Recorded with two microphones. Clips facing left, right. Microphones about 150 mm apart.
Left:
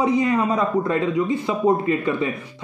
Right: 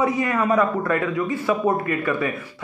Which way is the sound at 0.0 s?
20° left (ahead or behind).